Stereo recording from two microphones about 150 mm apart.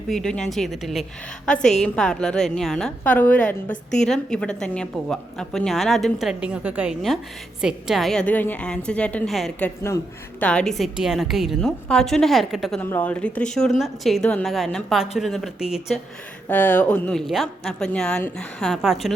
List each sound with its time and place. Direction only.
0.1 s a woman's voice: 5° left (ahead or behind)
9.6 s a woman's voice: 15° left (ahead or behind)
10.4 s a woman's voice: 5° left (ahead or behind)
12.8 s a woman's voice: 10° left (ahead or behind); by 16.0 s 5° right (ahead or behind)
16.5 s a woman's voice: 10° left (ahead or behind)